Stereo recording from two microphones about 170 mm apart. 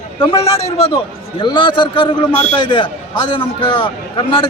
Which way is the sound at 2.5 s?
25° left (ahead or behind).